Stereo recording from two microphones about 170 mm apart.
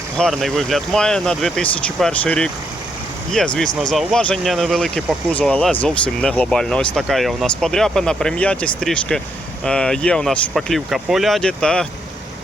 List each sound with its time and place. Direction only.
0.2 s speech: centre (ahead or behind)